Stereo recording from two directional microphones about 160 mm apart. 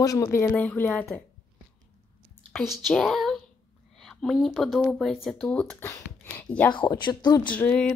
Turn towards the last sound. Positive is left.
turn(degrees=5)  # may be behind; listen again after turning